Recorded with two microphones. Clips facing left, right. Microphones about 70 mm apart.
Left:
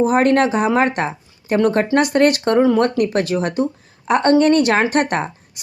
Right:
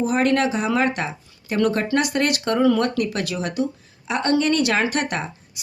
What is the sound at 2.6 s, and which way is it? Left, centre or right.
Speech, left.